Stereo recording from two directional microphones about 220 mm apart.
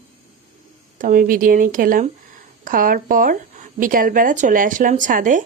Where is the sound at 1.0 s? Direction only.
40° right (ahead or behind).